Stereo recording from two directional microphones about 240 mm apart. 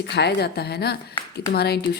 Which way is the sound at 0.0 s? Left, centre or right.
Left.